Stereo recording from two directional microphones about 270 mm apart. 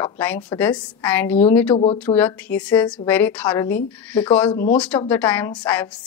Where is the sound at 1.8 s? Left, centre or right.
Left.